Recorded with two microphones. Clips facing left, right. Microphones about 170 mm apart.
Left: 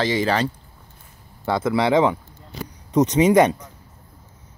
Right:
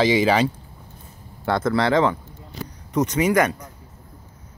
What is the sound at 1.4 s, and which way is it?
Speech, 5° left (ahead or behind).